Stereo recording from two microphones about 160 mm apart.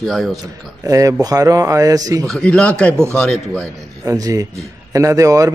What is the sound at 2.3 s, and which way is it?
A man's voice, 5° left (ahead or behind).